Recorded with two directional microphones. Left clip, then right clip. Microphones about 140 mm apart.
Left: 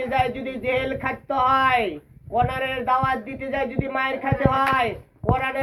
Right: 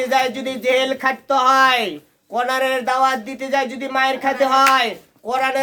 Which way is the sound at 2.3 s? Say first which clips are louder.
Right 4 dB; 40° right (ahead or behind).